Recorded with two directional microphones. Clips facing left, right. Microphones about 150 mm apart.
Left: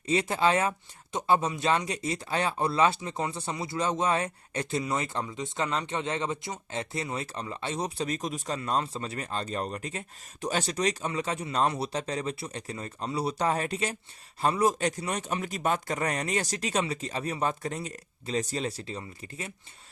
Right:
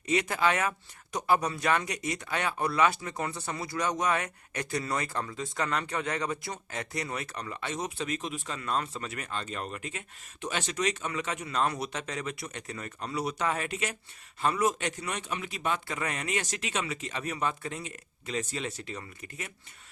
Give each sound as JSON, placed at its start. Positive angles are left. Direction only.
{"t": 0.0, "sound": "speech", "side_deg": 30}